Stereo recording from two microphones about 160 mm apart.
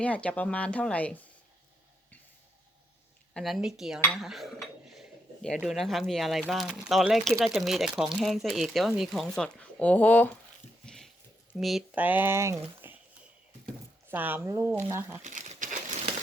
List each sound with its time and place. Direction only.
0.0 s speech: 10° left (ahead or behind)
3.3 s speech: centre (ahead or behind)
4.9 s a sound: 5° left (ahead or behind)
5.5 s speech: centre (ahead or behind)
10.8 s a sound: 5° left (ahead or behind)
11.5 s speech: centre (ahead or behind)
12.0 s speech: 10° right (ahead or behind)
14.1 s speech: 10° right (ahead or behind)
15.2 s speech: 50° right (ahead or behind)